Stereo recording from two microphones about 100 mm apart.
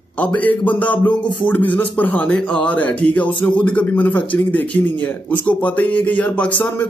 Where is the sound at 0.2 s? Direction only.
15° left (ahead or behind).